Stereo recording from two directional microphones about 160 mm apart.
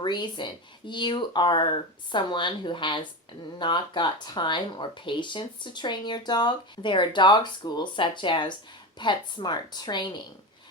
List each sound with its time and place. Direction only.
0.0 s speech: 30° left (ahead or behind)